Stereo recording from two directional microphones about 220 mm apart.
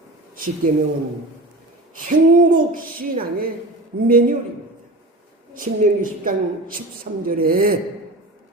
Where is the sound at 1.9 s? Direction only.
40° right (ahead or behind).